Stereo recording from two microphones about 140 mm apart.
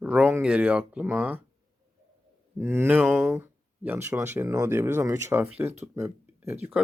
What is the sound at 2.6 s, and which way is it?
Speech, 15° right (ahead or behind).